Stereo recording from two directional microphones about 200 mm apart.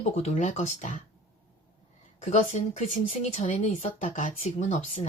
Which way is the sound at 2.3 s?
35° left (ahead or behind).